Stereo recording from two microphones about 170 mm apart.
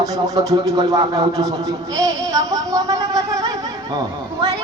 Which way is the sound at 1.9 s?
20° right (ahead or behind).